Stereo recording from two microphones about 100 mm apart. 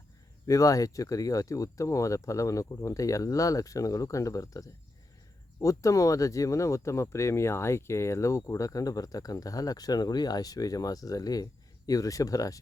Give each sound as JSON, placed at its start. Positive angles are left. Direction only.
{"t": 0.4, "sound": "speech", "side_deg": 35}